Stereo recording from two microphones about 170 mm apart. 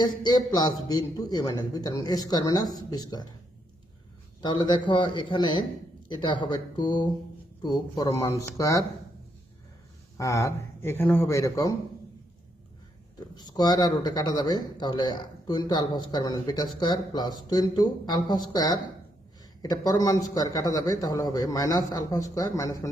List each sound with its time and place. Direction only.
0.0 s a man's voice: 25° left (ahead or behind)
4.4 s a man's voice: 30° left (ahead or behind)
10.2 s a man's voice: 20° left (ahead or behind)
13.3 s a man's voice: 25° left (ahead or behind)